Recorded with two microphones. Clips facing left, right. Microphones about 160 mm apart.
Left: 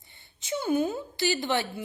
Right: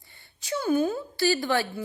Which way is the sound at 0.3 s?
20° left (ahead or behind).